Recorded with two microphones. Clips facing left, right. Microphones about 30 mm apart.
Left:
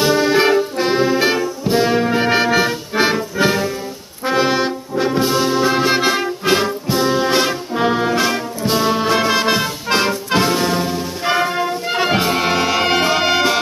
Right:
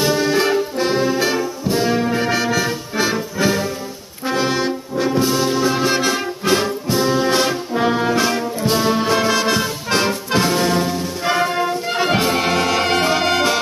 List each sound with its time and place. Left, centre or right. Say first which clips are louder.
0.0 s brass instrument: left 3 dB; centre